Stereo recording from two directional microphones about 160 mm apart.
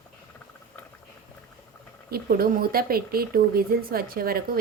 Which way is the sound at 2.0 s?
70° right (ahead or behind).